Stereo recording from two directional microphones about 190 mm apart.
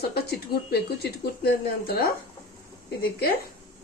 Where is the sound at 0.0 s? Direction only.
55° left (ahead or behind).